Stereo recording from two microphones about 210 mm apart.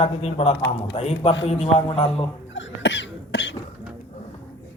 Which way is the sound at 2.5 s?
55° left (ahead or behind).